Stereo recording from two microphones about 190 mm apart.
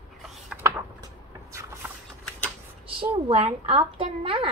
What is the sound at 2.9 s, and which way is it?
A woman's voice, 30° right (ahead or behind).